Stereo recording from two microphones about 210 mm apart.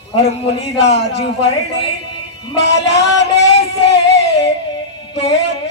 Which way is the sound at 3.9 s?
55° left (ahead or behind).